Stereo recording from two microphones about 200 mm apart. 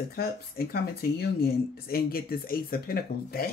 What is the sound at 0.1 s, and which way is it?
Speech, 50° left (ahead or behind).